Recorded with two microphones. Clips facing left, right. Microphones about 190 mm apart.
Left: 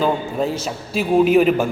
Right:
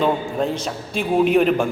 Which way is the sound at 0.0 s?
Centre (ahead or behind).